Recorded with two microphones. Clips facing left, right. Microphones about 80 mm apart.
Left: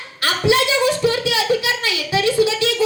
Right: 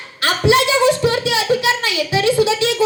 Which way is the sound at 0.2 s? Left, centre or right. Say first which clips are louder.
Right 2 dB; right.